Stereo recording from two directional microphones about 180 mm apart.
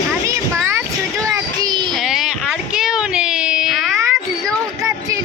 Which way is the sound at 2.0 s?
Centre (ahead or behind).